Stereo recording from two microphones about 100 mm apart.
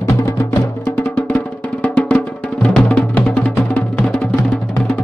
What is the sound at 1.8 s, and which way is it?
Music, 10° left (ahead or behind).